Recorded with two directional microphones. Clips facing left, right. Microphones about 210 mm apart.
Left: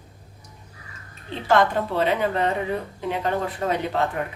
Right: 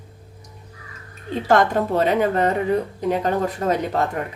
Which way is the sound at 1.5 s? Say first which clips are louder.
Right 2 dB; 45° right (ahead or behind).